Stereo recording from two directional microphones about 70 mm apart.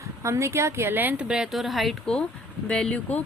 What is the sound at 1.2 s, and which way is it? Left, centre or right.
Speech, centre.